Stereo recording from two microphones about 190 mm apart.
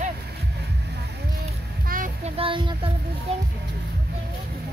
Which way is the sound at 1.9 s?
45° right (ahead or behind).